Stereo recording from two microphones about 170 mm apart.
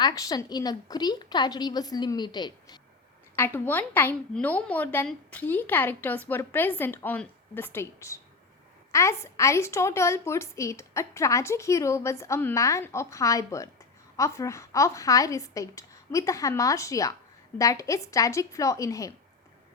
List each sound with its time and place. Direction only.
0.0 s a woman's voice: 20° left (ahead or behind)
3.3 s a woman's voice: 15° left (ahead or behind)